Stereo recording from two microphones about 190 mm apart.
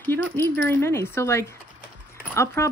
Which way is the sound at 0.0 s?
10° left (ahead or behind).